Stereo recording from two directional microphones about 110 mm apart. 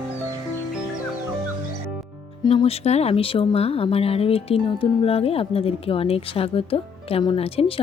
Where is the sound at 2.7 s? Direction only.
70° left (ahead or behind).